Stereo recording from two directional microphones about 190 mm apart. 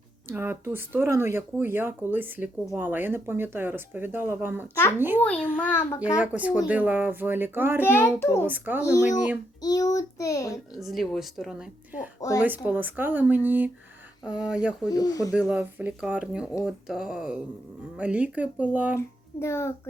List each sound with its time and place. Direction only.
0.3 s speech: 10° right (ahead or behind)
5.2 s a child's voice: 5° left (ahead or behind)
6.1 s speech: 10° right (ahead or behind)
7.9 s a child's voice: 10° left (ahead or behind)
8.4 s speech: 10° right (ahead or behind)
9.6 s a child's voice: 20° left (ahead or behind)
10.8 s a woman's voice: centre (ahead or behind)
14.8 s speech: 20° left (ahead or behind)
15.4 s a woman's voice: 5° right (ahead or behind)
18.9 s speech: 15° left (ahead or behind)